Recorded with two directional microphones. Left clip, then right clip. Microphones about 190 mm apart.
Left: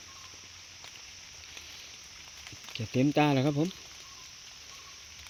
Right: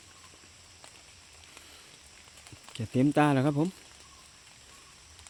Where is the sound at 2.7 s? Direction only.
15° right (ahead or behind).